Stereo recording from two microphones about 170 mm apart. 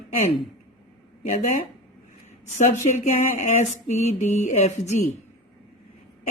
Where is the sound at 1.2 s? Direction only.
45° left (ahead or behind).